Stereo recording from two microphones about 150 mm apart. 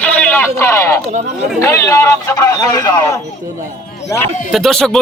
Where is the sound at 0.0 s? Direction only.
10° left (ahead or behind).